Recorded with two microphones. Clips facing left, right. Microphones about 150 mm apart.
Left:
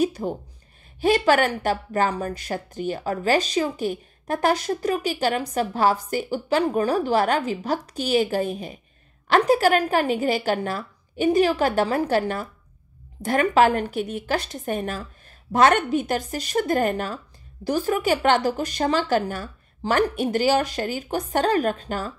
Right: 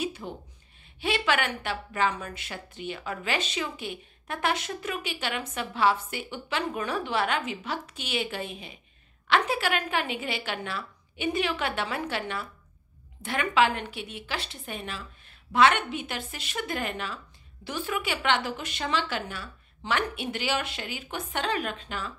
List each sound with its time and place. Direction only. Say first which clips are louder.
0.0 s a woman's voice: left 10 dB; 40° left (ahead or behind)